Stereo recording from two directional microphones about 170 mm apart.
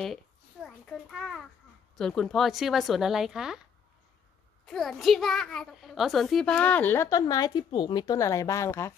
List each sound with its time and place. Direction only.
0.8 s speech: centre (ahead or behind)
4.6 s a child's voice: centre (ahead or behind)